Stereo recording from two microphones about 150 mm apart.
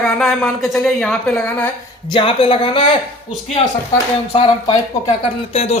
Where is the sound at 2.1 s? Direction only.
35° left (ahead or behind).